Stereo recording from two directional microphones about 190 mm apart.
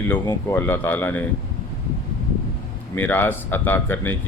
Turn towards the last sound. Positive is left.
turn(degrees=10)  # may be behind; listen again after turning